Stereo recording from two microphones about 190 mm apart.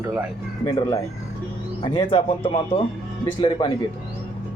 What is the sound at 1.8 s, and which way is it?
A man's voice, 25° left (ahead or behind).